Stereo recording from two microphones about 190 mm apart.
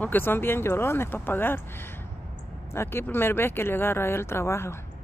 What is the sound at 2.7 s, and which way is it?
Speech, 15° left (ahead or behind).